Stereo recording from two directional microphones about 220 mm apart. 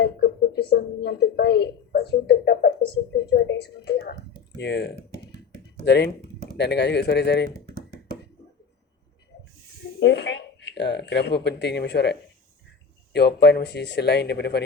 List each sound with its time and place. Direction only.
0.0 s speech: 45° left (ahead or behind)
10.0 s speech: 50° left (ahead or behind)
13.1 s speech: 50° left (ahead or behind)